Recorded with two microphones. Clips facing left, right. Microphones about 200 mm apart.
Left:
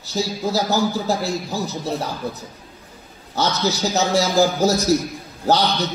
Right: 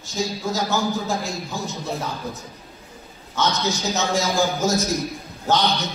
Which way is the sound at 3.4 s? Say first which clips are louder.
Left 2 dB; 35° left (ahead or behind).